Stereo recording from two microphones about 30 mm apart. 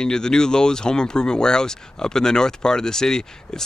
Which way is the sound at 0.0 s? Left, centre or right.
Left.